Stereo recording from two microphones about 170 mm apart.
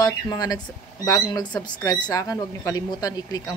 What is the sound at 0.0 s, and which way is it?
Speech, 20° left (ahead or behind).